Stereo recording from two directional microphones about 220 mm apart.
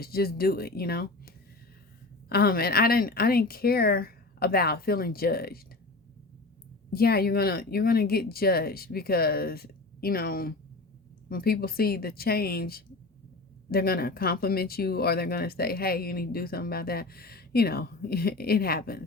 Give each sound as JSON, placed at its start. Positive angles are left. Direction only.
{"t": 0.0, "sound": "speech", "side_deg": 45}
{"t": 2.3, "sound": "speech", "side_deg": 45}
{"t": 6.9, "sound": "speech", "side_deg": 45}